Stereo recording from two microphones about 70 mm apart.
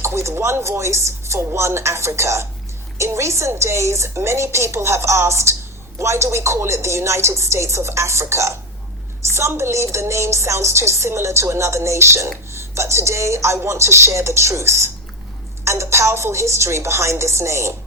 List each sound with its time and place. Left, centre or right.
0.0 s a woman's voice: right